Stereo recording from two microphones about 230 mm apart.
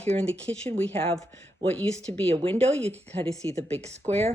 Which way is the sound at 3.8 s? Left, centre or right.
Right.